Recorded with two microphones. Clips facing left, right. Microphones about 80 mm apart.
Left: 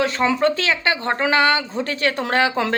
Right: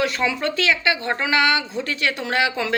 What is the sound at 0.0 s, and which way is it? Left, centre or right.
Speech, left.